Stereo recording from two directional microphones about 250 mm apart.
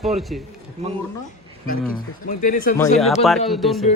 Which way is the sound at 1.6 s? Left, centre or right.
Left.